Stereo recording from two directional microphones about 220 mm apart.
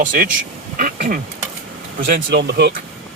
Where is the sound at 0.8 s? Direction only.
40° right (ahead or behind).